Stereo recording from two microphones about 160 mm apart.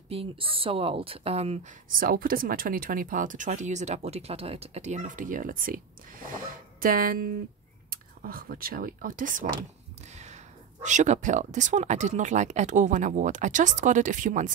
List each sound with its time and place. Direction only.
0.1 s speech: 35° right (ahead or behind)
1.9 s speech: 65° right (ahead or behind)
10.1 s speech: 45° right (ahead or behind)